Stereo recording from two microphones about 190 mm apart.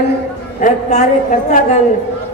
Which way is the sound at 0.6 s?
40° left (ahead or behind).